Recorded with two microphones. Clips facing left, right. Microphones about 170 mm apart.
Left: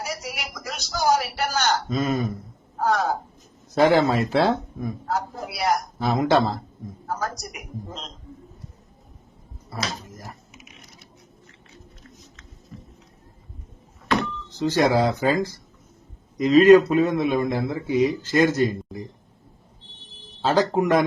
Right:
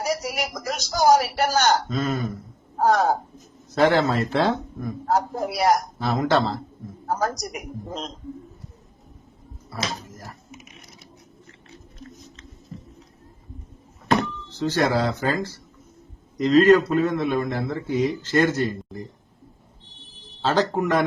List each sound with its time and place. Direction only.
0.0 s a sound: 40° right (ahead or behind)
2.7 s a sound: 45° right (ahead or behind)
3.8 s a man's voice: 15° left (ahead or behind)
5.0 s a man's voice: 40° right (ahead or behind)
6.0 s a man's voice: 15° left (ahead or behind)
7.1 s a man's voice: 40° right (ahead or behind)
14.5 s a man's voice: 15° left (ahead or behind)
20.4 s a man's voice: 10° left (ahead or behind)